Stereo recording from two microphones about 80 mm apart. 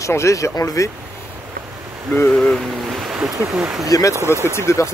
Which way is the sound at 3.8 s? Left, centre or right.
Left.